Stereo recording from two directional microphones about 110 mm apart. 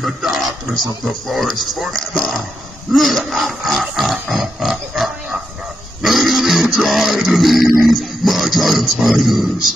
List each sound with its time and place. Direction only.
0.0 s speech: centre (ahead or behind)
3.0 s a sound: centre (ahead or behind)
7.8 s music: centre (ahead or behind)